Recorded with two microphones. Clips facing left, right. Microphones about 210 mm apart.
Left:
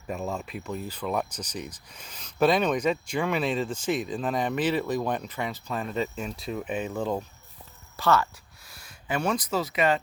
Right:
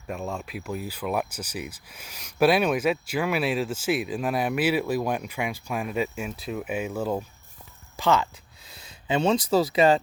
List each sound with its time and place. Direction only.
0.1 s speech: centre (ahead or behind)
7.9 s speech: 15° right (ahead or behind)